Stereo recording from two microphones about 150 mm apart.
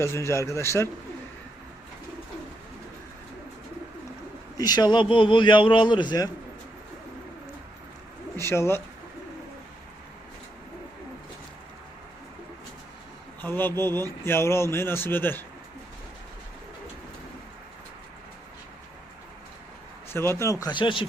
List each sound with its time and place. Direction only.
0.0 s speech: 20° left (ahead or behind)
4.5 s a man's voice: 25° left (ahead or behind)
8.4 s speech: 15° left (ahead or behind)
13.4 s speech: 15° left (ahead or behind)
20.1 s speech: 15° left (ahead or behind); by 21.1 s 35° left (ahead or behind)